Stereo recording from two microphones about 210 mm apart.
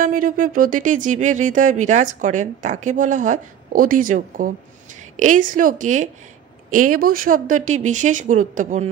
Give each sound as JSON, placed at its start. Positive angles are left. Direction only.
{"t": 0.0, "sound": "speech", "side_deg": -40}